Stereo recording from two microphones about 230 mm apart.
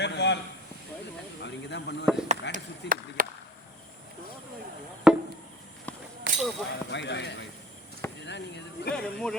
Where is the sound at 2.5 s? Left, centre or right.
Right.